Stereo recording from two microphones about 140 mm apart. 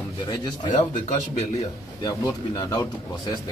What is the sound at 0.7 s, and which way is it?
Speech, 50° left (ahead or behind).